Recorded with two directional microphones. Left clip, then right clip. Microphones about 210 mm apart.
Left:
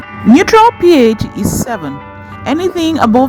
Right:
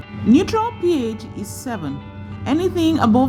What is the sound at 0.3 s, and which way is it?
Speech, 30° left (ahead or behind).